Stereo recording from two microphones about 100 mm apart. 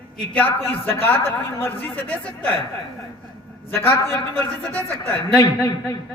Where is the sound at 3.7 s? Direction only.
25° left (ahead or behind).